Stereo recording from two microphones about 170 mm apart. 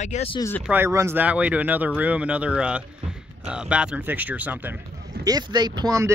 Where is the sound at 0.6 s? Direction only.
10° right (ahead or behind).